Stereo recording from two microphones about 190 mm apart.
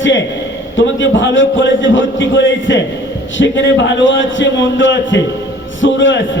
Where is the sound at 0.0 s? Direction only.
75° left (ahead or behind).